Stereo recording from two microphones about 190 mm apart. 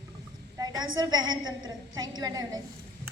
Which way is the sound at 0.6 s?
20° right (ahead or behind).